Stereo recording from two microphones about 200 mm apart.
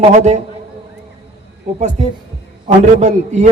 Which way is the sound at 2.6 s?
35° right (ahead or behind).